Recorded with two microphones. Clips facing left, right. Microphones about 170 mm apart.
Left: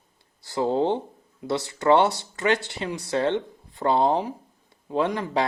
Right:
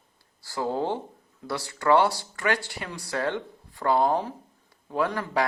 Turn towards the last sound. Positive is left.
turn(degrees=25)  # may be behind; listen again after turning